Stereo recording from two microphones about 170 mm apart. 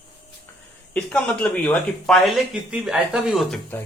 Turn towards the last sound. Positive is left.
turn(degrees=0)  # may be behind; listen again after turning